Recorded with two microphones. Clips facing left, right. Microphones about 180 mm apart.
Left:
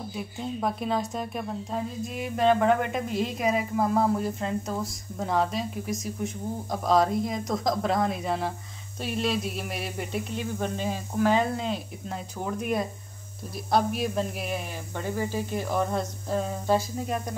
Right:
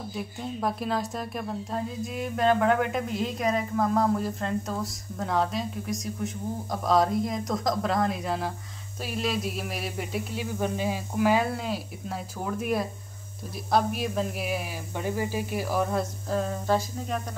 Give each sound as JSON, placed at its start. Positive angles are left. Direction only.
{"t": 0.1, "sound": "speech", "side_deg": 0}
{"t": 15.0, "sound": "speech", "side_deg": -15}